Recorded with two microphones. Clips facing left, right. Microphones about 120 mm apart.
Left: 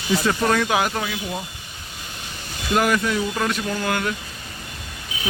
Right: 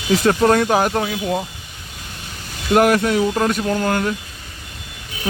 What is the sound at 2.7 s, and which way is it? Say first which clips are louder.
Speech: right 6 dB; 55° right (ahead or behind).